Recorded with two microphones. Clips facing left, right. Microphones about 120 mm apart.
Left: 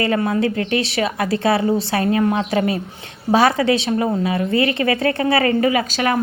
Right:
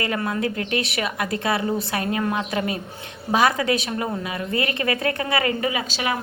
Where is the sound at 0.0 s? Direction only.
30° left (ahead or behind).